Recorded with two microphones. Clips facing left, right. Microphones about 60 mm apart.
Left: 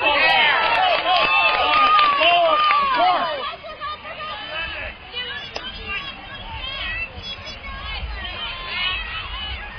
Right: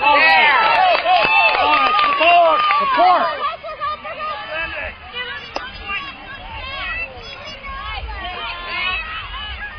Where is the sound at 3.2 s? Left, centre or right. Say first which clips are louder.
Right 5 dB; right.